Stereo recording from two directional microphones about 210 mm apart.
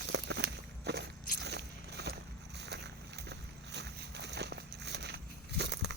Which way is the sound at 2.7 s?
55° right (ahead or behind).